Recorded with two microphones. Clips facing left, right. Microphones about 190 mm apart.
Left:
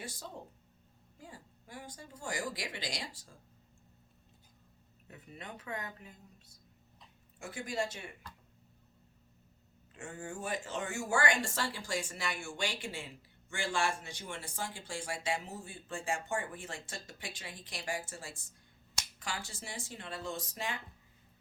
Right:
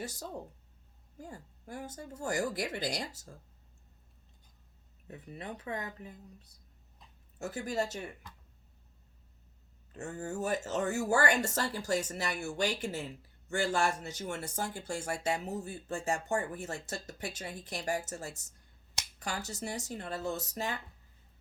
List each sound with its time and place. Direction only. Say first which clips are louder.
0.0 s speech: right 5 dB; 40° right (ahead or behind)
5.0 s speech: right 5 dB; 35° right (ahead or behind)
7.3 s speech: right 3 dB; 40° right (ahead or behind)
9.9 s speech: right 5 dB; 40° right (ahead or behind)